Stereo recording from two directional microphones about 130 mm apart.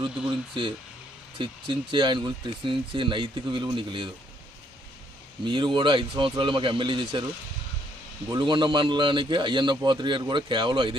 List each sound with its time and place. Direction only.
0.3 s a man's voice: 40° right (ahead or behind)
5.5 s a man's voice: 40° right (ahead or behind)
8.3 s a man's voice: 35° right (ahead or behind)